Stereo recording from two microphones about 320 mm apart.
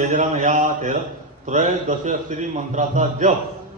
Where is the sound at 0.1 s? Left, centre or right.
Right.